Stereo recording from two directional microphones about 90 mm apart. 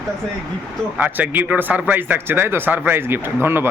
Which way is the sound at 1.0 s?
20° right (ahead or behind).